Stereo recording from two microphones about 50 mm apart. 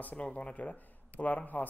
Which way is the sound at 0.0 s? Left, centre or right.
Left.